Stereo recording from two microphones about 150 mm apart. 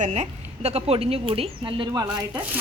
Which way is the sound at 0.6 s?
45° right (ahead or behind).